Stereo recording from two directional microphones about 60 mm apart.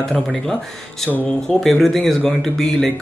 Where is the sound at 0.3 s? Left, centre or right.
Centre.